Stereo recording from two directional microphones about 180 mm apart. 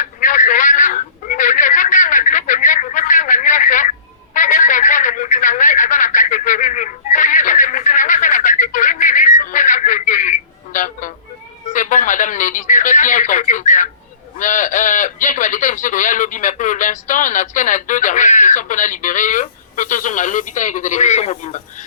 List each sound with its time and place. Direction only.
0.0 s telephone: 45° left (ahead or behind)
11.7 s radio: 45° left (ahead or behind)
14.3 s a sound: 45° left (ahead or behind)